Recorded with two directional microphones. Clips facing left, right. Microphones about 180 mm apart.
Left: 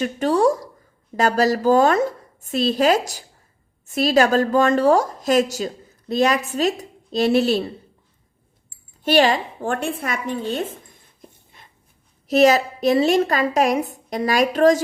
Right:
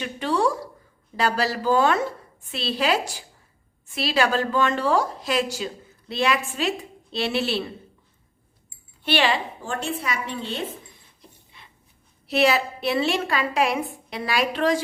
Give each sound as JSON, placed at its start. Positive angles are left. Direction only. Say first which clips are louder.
{"t": 0.0, "sound": "a woman's voice", "louder": "left 6 dB", "side_deg": 45}
{"t": 9.0, "sound": "a woman's voice", "louder": "left 6 dB", "side_deg": 40}